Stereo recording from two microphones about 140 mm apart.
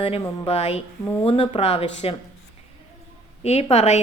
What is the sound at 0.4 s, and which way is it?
A woman's voice, 45° left (ahead or behind).